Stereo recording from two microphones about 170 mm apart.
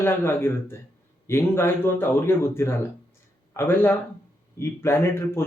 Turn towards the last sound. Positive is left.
turn(degrees=15)  # may be behind; listen again after turning